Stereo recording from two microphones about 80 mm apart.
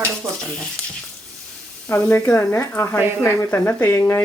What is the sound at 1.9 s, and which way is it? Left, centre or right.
Speech, left.